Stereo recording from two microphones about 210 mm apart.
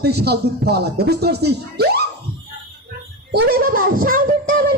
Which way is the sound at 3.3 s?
50° right (ahead or behind).